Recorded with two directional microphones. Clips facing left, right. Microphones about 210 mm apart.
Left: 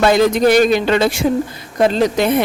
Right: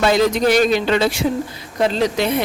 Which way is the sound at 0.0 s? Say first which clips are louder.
Left 3 dB; 55° left (ahead or behind).